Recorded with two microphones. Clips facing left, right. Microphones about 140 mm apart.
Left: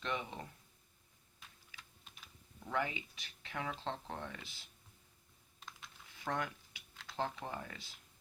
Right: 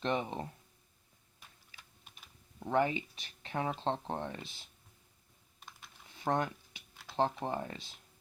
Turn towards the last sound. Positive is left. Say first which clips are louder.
# right 7 dB
turn(degrees=-25)  # may be behind; listen again after turning